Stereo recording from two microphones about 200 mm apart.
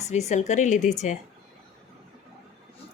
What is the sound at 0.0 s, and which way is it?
A woman's voice, 35° left (ahead or behind).